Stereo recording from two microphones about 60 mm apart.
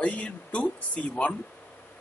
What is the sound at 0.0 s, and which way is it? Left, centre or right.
Speech, centre.